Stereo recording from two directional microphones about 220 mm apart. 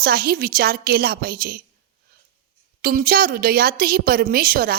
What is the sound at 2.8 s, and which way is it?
A woman's voice, 40° right (ahead or behind).